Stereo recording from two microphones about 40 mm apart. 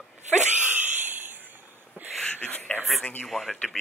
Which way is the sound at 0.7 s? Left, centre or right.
Right.